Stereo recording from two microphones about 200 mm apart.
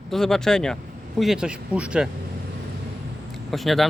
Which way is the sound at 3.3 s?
Centre (ahead or behind).